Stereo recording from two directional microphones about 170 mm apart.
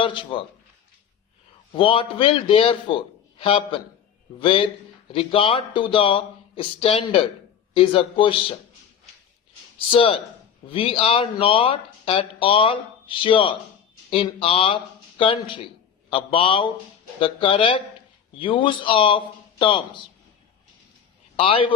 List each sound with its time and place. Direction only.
0.0 s speech: 30° left (ahead or behind)
1.7 s speech: 30° left (ahead or behind)
9.7 s speech: 30° left (ahead or behind)
21.3 s a man's voice: 30° left (ahead or behind)